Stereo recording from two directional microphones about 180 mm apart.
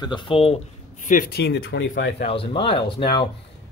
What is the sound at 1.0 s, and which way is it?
Speech, 55° left (ahead or behind).